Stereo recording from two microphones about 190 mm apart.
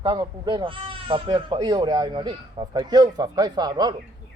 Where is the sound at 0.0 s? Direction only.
25° right (ahead or behind).